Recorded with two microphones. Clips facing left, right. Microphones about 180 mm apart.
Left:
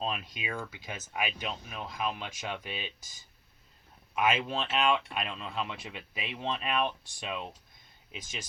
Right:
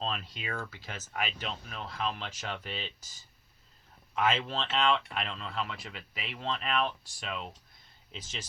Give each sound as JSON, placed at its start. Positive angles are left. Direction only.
{"t": 0.0, "sound": "speech", "side_deg": 15}